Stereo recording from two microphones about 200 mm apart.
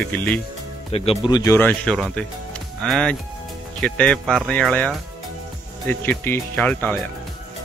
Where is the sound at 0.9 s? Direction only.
25° left (ahead or behind); by 7.0 s 5° left (ahead or behind).